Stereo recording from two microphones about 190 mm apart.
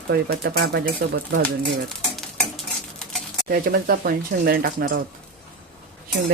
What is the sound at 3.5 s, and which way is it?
Speech, 50° right (ahead or behind).